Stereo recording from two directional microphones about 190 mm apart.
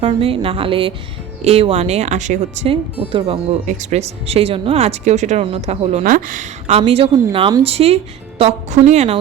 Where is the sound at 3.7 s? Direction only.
40° right (ahead or behind).